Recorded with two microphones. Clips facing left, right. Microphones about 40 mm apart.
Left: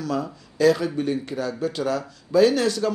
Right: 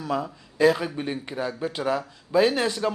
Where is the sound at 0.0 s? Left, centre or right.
Right.